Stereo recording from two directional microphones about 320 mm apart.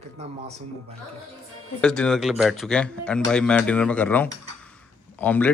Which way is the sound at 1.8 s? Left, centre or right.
Centre.